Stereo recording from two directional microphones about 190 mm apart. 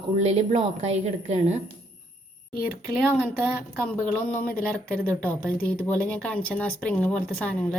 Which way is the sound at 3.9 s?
10° left (ahead or behind).